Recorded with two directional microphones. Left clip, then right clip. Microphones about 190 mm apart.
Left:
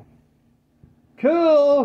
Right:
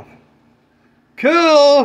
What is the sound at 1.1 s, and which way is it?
Speech, 25° right (ahead or behind).